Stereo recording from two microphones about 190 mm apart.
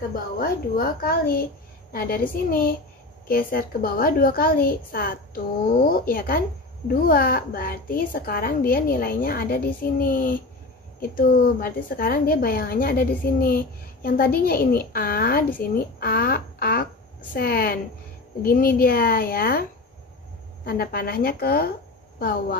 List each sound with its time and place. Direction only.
0.1 s a woman's voice: 50° left (ahead or behind)
20.6 s a woman's voice: 50° left (ahead or behind)